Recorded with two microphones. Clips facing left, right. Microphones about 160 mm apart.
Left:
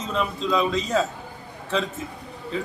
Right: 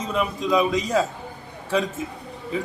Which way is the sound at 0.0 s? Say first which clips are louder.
Right 1 dB; 10° right (ahead or behind).